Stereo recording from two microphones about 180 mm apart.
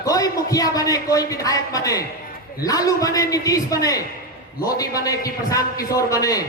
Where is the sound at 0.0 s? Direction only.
20° left (ahead or behind).